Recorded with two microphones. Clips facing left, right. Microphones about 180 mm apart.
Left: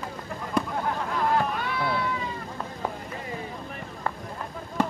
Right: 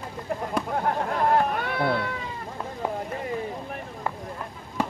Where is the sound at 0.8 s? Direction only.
55° right (ahead or behind).